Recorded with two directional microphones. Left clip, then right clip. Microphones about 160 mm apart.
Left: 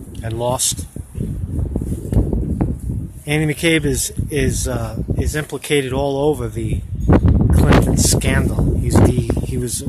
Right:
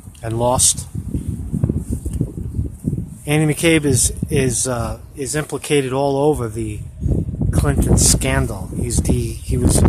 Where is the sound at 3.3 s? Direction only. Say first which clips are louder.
Right 1 dB; 15° right (ahead or behind).